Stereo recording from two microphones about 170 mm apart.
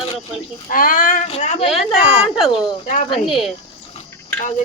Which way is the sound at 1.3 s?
40° left (ahead or behind).